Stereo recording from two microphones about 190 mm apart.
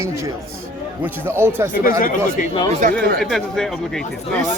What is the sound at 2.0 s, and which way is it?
Speech, 45° left (ahead or behind).